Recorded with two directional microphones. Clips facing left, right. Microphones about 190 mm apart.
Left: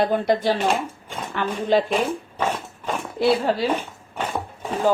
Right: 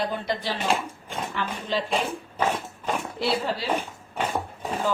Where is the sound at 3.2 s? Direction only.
50° left (ahead or behind).